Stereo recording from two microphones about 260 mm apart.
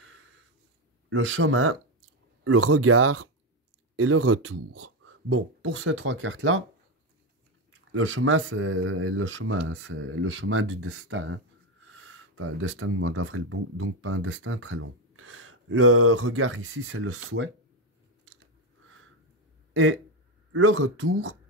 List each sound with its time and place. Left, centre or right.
1.1 s speech: right
7.9 s speech: right
19.7 s speech: right